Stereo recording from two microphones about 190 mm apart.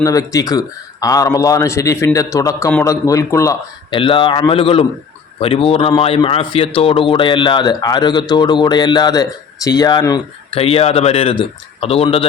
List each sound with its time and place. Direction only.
0.0 s a man's voice: 15° left (ahead or behind)
10.6 s speech: 30° left (ahead or behind)